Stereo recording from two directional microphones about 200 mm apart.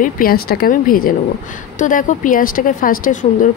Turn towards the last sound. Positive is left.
turn(degrees=40)  # may be behind; listen again after turning